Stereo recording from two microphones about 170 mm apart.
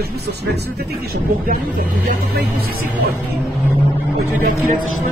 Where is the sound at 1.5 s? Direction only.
55° right (ahead or behind).